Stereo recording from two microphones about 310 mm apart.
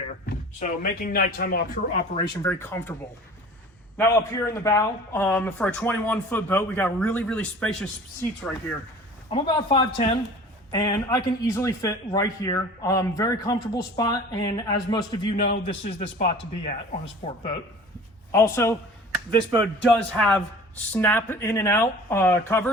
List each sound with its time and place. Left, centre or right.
0.3 s speech: left
2.1 s a man's voice: centre
3.9 s a man's voice: centre
9.3 s a man's voice: centre
18.3 s a man's voice: centre
19.4 s speech: centre
20.1 s a man's voice: centre